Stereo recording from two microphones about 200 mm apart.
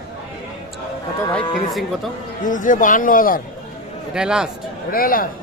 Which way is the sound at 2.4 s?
40° left (ahead or behind).